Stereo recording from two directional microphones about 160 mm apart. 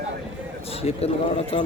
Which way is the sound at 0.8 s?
40° left (ahead or behind).